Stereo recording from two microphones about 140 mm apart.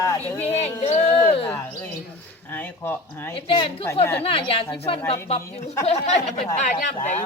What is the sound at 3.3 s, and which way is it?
Speech, 35° left (ahead or behind).